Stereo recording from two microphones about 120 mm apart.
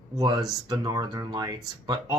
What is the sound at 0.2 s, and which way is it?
Speech, 30° right (ahead or behind).